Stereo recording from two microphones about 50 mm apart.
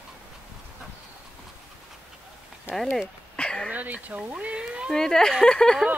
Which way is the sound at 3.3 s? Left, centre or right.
Centre.